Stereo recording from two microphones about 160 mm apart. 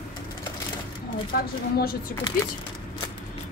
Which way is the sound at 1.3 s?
75° left (ahead or behind).